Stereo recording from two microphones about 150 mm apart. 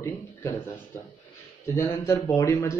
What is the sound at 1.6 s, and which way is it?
Speech, 20° left (ahead or behind).